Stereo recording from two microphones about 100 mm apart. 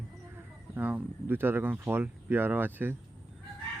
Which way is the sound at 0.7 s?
15° right (ahead or behind).